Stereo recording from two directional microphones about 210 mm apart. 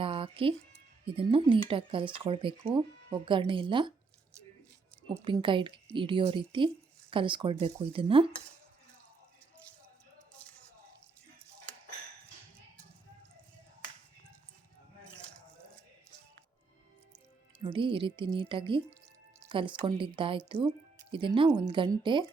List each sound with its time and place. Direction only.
0.0 s music: 25° right (ahead or behind)
1.0 s speech: 25° right (ahead or behind)
5.0 s speech: 25° right (ahead or behind)
17.6 s speech: 25° right (ahead or behind)